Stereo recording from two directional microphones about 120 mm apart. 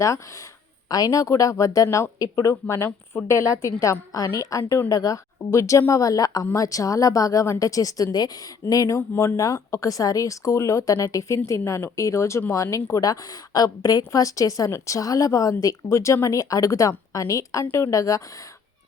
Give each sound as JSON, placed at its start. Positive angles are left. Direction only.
{"t": 0.9, "sound": "speech", "side_deg": 30}